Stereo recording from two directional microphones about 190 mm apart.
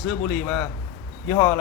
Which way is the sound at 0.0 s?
5° left (ahead or behind).